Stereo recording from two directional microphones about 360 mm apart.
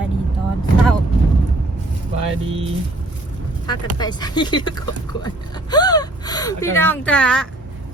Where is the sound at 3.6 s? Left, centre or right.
Centre.